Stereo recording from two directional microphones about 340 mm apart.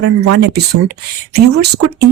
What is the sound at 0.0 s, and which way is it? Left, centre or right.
Speech, right.